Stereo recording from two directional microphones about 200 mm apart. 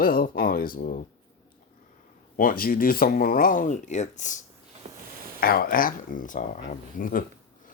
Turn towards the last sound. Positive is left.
turn(degrees=45)  # may be behind; listen again after turning